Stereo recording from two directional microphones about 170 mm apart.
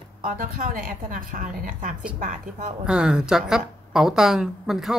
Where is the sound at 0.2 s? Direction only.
55° right (ahead or behind).